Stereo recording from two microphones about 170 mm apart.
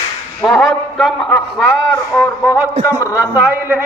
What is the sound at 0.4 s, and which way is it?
A man's voice, centre (ahead or behind).